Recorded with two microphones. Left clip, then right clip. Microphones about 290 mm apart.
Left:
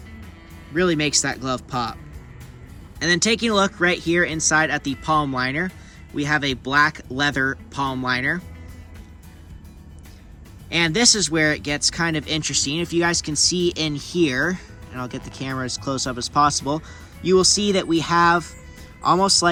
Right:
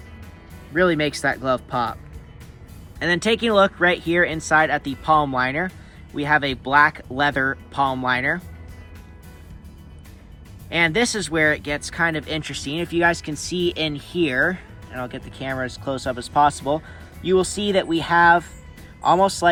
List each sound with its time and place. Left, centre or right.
0.7 s speech: centre
3.0 s speech: centre
10.7 s speech: centre